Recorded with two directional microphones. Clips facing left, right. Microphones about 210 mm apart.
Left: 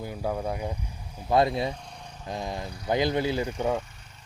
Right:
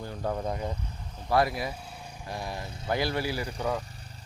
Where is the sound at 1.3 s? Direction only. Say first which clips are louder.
Left 3 dB; 20° left (ahead or behind).